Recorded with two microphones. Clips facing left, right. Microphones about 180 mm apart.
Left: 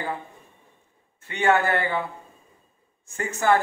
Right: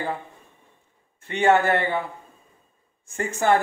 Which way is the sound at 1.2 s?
25° right (ahead or behind).